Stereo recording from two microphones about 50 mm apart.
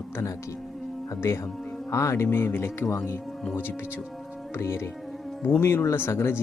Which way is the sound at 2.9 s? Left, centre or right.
Left.